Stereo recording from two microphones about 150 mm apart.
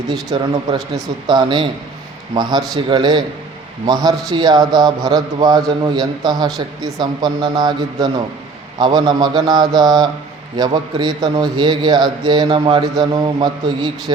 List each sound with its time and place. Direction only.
0.1 s a man's voice: 25° right (ahead or behind)